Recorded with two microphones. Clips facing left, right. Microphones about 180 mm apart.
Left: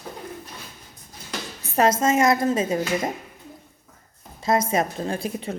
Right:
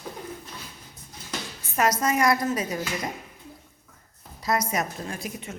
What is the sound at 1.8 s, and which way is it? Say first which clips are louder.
A woman's voice: left 4 dB; 25° left (ahead or behind).